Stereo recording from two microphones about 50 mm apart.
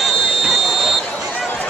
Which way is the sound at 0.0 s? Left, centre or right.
Centre.